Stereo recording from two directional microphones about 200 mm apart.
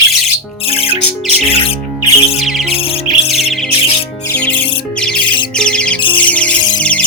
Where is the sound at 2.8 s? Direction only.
30° left (ahead or behind).